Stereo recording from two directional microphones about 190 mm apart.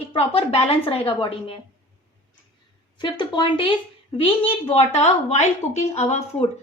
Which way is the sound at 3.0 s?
25° left (ahead or behind).